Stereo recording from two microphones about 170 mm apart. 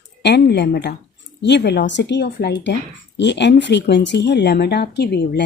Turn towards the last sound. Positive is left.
turn(degrees=80)